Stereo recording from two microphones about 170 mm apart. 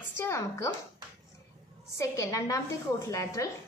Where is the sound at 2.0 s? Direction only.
20° left (ahead or behind).